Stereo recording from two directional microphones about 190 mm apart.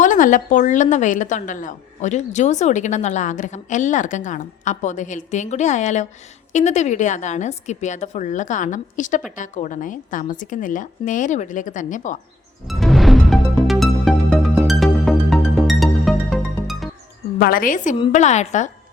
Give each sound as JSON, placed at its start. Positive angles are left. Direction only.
{"t": 0.0, "sound": "a woman's voice", "side_deg": 40}
{"t": 12.6, "sound": "music", "side_deg": 0}
{"t": 17.4, "sound": "a woman's voice", "side_deg": 50}